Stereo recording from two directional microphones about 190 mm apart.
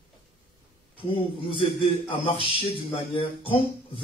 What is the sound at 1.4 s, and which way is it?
A man's voice, 25° left (ahead or behind).